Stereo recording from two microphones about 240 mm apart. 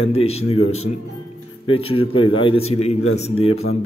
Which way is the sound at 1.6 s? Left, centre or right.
Left.